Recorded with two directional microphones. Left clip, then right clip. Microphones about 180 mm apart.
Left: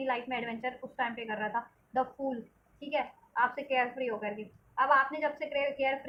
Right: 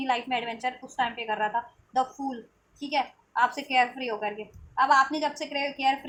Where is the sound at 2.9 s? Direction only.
40° right (ahead or behind).